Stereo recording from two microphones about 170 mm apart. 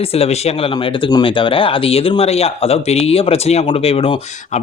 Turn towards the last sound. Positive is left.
turn(degrees=35)  # may be behind; listen again after turning